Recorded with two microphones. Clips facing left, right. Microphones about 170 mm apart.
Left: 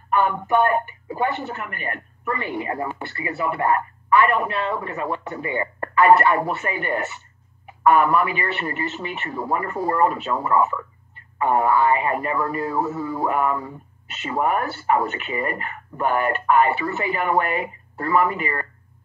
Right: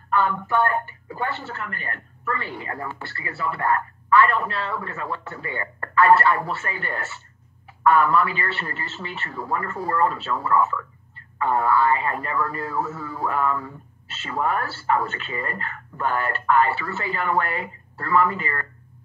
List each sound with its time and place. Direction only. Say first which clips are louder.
0.1 s a man's voice: left 3 dB; 20° left (ahead or behind)